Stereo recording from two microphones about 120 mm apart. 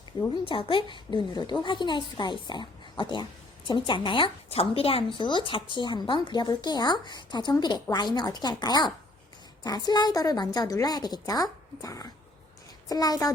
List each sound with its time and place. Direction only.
0.4 s a woman's voice: 45° left (ahead or behind)
5.1 s a woman's voice: 40° left (ahead or behind)